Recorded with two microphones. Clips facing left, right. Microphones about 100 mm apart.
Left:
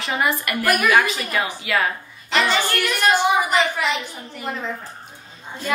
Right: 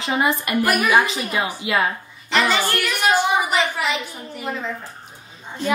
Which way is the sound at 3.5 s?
Centre (ahead or behind).